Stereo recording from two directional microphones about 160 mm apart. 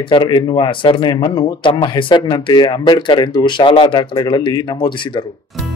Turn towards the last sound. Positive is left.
turn(degrees=30)  # may be behind; listen again after turning